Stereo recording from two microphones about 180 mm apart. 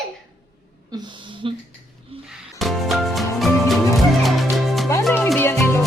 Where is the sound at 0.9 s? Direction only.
25° right (ahead or behind).